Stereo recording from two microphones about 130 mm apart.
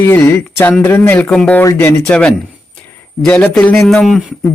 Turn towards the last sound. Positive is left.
turn(degrees=-5)  # may be behind; listen again after turning